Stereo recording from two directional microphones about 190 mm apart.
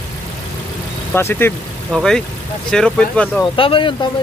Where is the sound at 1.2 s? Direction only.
10° left (ahead or behind).